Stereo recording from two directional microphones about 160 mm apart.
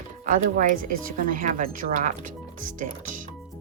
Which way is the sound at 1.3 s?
55° right (ahead or behind).